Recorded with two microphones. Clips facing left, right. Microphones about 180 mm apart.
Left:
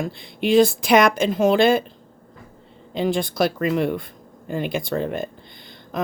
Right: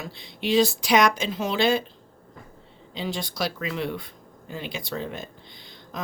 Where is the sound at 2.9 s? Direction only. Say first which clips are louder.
Left 9 dB; 55° left (ahead or behind).